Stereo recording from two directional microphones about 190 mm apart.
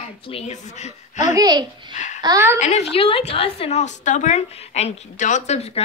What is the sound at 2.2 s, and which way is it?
Speech, 15° right (ahead or behind).